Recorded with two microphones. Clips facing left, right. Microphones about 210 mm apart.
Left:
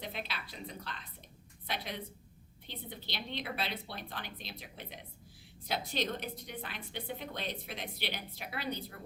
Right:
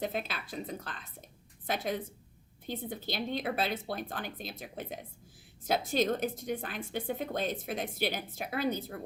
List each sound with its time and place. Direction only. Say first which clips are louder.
0.0 s a woman's voice: right 7 dB; 45° right (ahead or behind)